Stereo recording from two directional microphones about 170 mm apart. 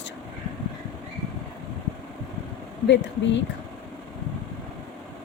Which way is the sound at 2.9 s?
90° left.